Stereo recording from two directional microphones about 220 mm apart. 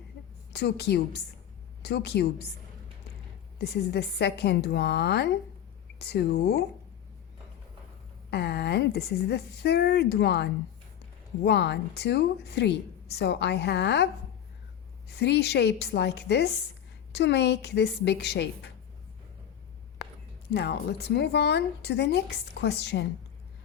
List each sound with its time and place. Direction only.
0.5 s a woman's voice: 50° left (ahead or behind)
3.6 s a woman's voice: 50° left (ahead or behind)
8.3 s a woman's voice: 50° left (ahead or behind)
20.5 s a woman's voice: 45° left (ahead or behind)